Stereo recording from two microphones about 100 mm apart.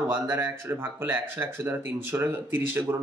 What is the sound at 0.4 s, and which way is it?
Speech, 25° right (ahead or behind).